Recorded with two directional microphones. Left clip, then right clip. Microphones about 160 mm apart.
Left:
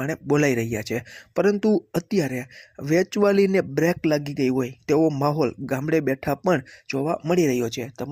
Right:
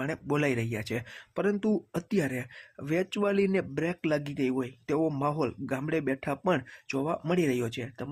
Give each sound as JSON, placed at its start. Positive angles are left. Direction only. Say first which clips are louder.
{"t": 0.0, "sound": "speech", "louder": "left 8 dB", "side_deg": 20}